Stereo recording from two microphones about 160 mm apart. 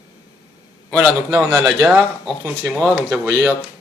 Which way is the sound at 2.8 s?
5° right (ahead or behind).